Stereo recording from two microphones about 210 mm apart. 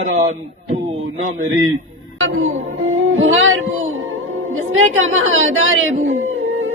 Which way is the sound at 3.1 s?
70° right (ahead or behind).